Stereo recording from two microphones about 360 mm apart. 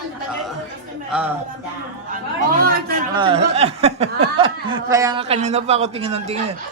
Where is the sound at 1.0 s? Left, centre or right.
Centre.